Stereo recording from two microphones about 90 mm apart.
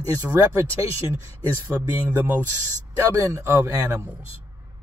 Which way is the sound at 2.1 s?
20° right (ahead or behind).